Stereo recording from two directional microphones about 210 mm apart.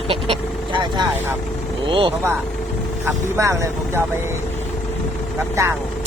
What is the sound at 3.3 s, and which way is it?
Speech, 15° right (ahead or behind).